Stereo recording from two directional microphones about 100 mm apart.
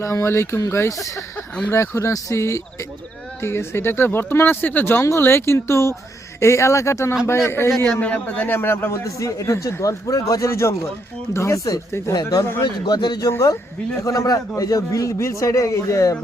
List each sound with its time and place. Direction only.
0.0 s a man's voice: 30° left (ahead or behind)
8.0 s a man's voice: 15° left (ahead or behind); by 12.6 s 30° left (ahead or behind)
12.6 s a man's voice: 50° left (ahead or behind); by 16.1 s 30° left (ahead or behind)